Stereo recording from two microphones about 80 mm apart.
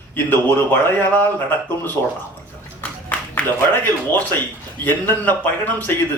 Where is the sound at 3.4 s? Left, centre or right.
Left.